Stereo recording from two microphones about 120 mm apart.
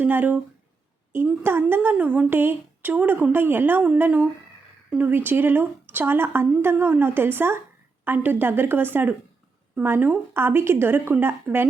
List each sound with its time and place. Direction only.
0.0 s a woman's voice: 15° right (ahead or behind)